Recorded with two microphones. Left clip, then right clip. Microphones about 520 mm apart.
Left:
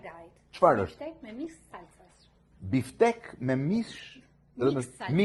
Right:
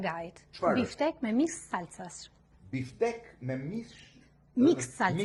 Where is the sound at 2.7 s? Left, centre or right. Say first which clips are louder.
Left 7 dB; left.